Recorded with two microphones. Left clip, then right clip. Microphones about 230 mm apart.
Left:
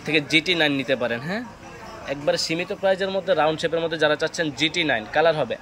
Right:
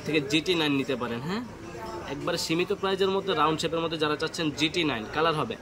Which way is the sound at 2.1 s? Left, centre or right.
Centre.